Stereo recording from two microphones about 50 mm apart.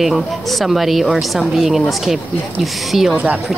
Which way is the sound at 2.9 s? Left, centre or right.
Centre.